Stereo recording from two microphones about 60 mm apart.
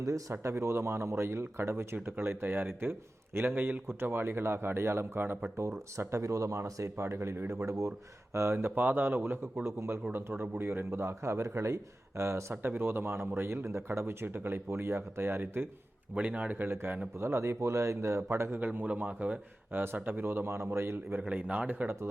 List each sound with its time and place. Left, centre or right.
0.0 s a man's voice: right
5.6 s a man's voice: right
16.1 s speech: right
17.2 s a man's voice: right
18.6 s speech: right
19.7 s a man's voice: right
21.2 s speech: right